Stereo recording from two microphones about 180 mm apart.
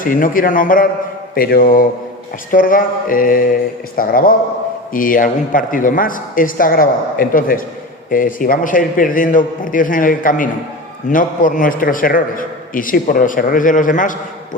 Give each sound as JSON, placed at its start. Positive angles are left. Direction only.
{"t": 0.0, "sound": "a man's voice", "side_deg": 50}